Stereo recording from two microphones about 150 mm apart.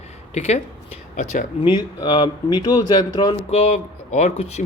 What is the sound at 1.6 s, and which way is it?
Speech, 30° left (ahead or behind).